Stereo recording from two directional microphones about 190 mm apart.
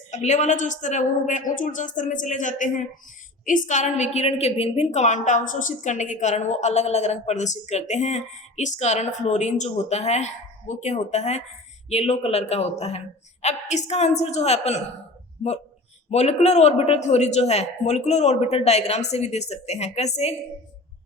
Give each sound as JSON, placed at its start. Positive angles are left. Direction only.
{"t": 0.1, "sound": "a woman's voice", "side_deg": 35}
{"t": 16.0, "sound": "a woman's voice", "side_deg": 35}